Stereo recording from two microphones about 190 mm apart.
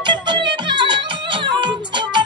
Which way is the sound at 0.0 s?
25° right (ahead or behind).